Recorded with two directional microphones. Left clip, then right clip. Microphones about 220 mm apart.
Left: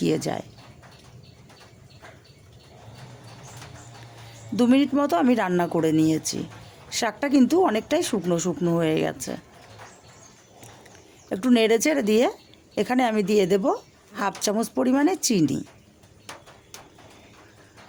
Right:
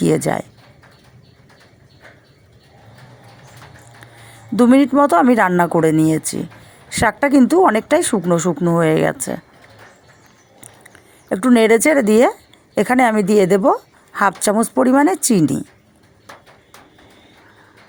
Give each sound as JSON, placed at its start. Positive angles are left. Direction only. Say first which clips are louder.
{"t": 0.0, "sound": "a woman's voice", "louder": "right 8 dB", "side_deg": -25}
{"t": 4.5, "sound": "a woman's voice", "louder": "right 8 dB", "side_deg": -20}
{"t": 11.3, "sound": "a woman's voice", "louder": "right 8 dB", "side_deg": -20}